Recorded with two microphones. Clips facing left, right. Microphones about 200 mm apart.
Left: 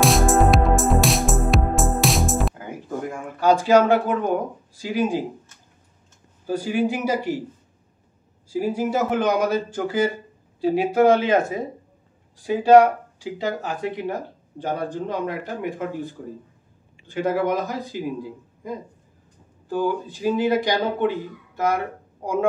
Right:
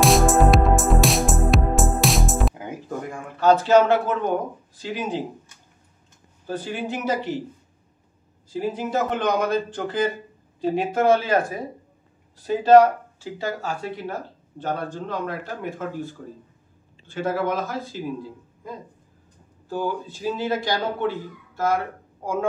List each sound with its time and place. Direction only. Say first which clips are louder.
0.0 s music: right 1 dB; centre (ahead or behind)
3.3 s speech: even; 10° left (ahead or behind)
6.4 s speech: left 6 dB; 10° left (ahead or behind)
8.5 s speech: left 3 dB; 10° left (ahead or behind)